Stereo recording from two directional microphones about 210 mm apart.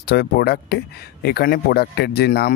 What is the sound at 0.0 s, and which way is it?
Speech, 50° left (ahead or behind).